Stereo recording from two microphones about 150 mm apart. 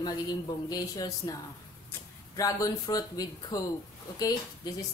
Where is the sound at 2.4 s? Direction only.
25° left (ahead or behind).